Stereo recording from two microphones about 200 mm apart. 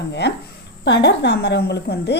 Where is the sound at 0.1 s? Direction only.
60° left (ahead or behind).